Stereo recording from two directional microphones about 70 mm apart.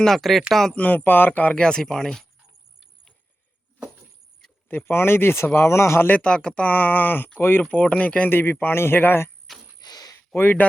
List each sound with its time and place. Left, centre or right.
0.0 s speech: centre
0.8 s speech: left
1.5 s speech: centre
4.7 s speech: left
6.1 s speech: centre
7.6 s speech: centre; by 9.3 s left
9.8 s a sound: left
10.2 s speech: left